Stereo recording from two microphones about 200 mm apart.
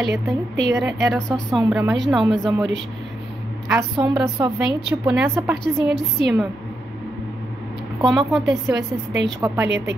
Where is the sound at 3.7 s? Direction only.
15° right (ahead or behind).